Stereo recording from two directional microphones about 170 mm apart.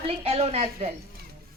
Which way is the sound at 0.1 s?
40° right (ahead or behind).